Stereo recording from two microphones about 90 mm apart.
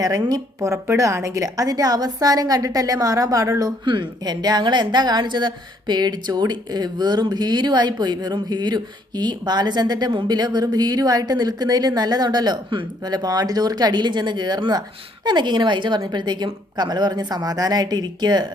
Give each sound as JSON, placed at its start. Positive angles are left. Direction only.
{"t": 0.0, "sound": "a woman's voice", "side_deg": -45}
{"t": 0.6, "sound": "a woman's voice", "side_deg": -35}
{"t": 3.8, "sound": "a woman's voice", "side_deg": -55}